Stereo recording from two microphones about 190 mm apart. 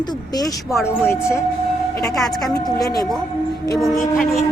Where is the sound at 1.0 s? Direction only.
15° left (ahead or behind).